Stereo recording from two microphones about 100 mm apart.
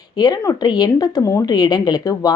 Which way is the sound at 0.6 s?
45° left (ahead or behind).